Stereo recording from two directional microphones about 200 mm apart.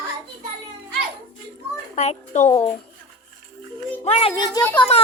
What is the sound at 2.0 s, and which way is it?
Speech, 35° left (ahead or behind).